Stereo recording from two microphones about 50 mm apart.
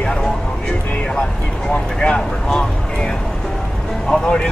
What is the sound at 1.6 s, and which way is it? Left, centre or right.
Vehicle, centre.